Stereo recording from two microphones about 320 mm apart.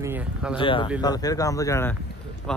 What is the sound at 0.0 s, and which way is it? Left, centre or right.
Speech, centre.